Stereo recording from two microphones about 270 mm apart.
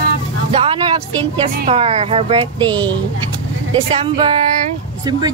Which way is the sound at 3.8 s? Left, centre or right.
Centre.